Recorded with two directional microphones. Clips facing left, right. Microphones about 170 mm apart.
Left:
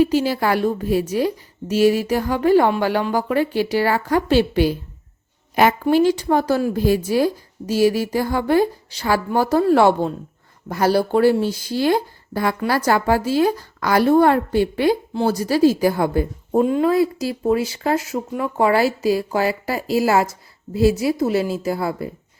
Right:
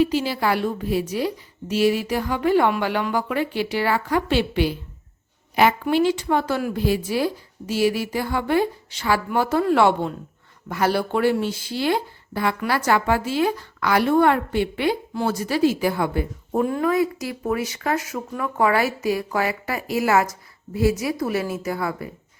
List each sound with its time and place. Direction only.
0.0 s a woman's voice: 45° left (ahead or behind)
5.8 s a woman's voice: 40° left (ahead or behind)
16.5 s speech: 20° left (ahead or behind)